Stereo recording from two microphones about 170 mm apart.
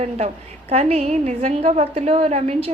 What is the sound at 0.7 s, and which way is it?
A woman's voice, 40° right (ahead or behind).